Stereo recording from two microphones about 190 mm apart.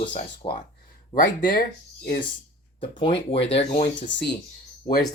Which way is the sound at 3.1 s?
70° left (ahead or behind).